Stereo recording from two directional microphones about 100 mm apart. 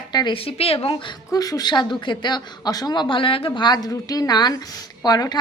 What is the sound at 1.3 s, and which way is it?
Speech, 40° left (ahead or behind).